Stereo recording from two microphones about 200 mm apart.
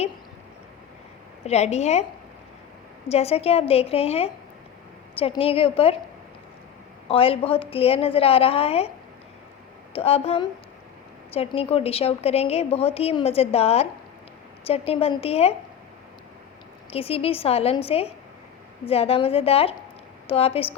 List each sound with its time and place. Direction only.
1.5 s a woman's voice: 35° left (ahead or behind)
3.1 s a woman's voice: 30° left (ahead or behind)
7.1 s a woman's voice: 30° left (ahead or behind)
9.9 s a woman's voice: 30° left (ahead or behind)
16.9 s a woman's voice: 30° left (ahead or behind)